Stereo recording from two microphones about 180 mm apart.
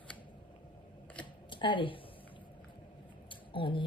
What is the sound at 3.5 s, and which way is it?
Speech, 30° left (ahead or behind).